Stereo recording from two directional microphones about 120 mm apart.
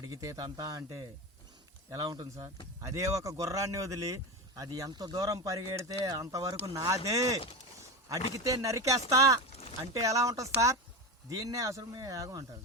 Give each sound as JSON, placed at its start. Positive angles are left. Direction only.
{"t": 0.0, "sound": "speech", "side_deg": -30}
{"t": 8.4, "sound": "speech", "side_deg": -30}
{"t": 9.5, "sound": "a sound", "side_deg": 60}
{"t": 9.9, "sound": "speech", "side_deg": -25}